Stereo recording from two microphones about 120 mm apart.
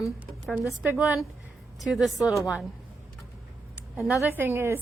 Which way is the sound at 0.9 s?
Centre (ahead or behind).